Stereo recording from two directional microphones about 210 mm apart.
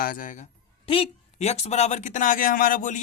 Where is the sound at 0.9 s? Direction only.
30° left (ahead or behind).